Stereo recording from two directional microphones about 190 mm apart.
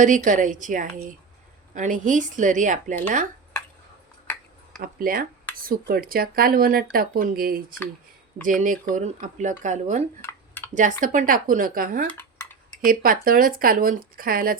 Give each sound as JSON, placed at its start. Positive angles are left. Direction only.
{"t": 0.0, "sound": "speech", "side_deg": -40}
{"t": 4.8, "sound": "speech", "side_deg": -50}
{"t": 10.2, "sound": "a sound", "side_deg": 10}
{"t": 11.0, "sound": "speech", "side_deg": -45}